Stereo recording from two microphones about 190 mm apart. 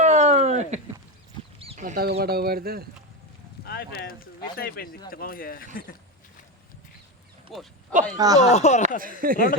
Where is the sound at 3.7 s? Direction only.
55° left (ahead or behind).